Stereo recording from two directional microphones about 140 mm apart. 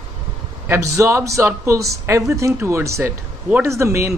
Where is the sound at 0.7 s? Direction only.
20° right (ahead or behind).